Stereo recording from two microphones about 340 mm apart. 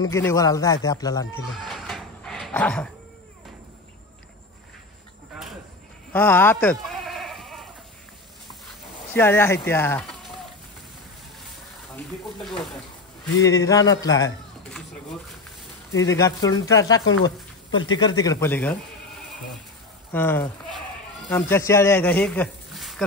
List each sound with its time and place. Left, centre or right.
0.0 s speech: centre
1.7 s dog: centre
6.1 s bleat: centre
9.1 s speech: centre
13.5 s a man's voice: centre
16.0 s speech: centre
17.0 s speech: left
17.9 s speech: centre
20.1 s speech: centre